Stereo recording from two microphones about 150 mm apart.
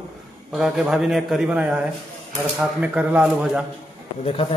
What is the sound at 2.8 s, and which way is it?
Speech, 10° right (ahead or behind).